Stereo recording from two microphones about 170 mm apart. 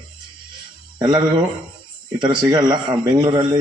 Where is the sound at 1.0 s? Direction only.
25° right (ahead or behind).